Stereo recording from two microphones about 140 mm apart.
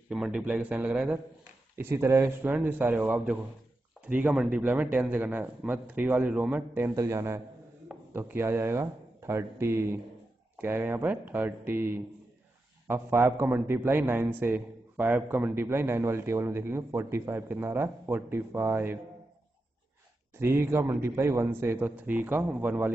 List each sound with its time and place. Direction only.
0.1 s a man's voice: 5° right (ahead or behind)
20.3 s a man's voice: 15° right (ahead or behind)